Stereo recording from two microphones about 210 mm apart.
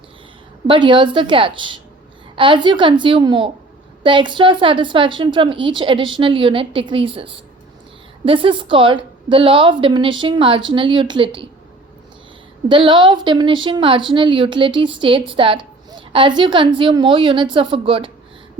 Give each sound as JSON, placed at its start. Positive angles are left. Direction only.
{"t": 0.7, "sound": "a woman's voice", "side_deg": -20}
{"t": 12.6, "sound": "a woman's voice", "side_deg": -25}